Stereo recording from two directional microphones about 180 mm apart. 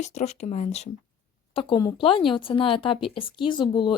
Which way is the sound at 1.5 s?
25° left (ahead or behind).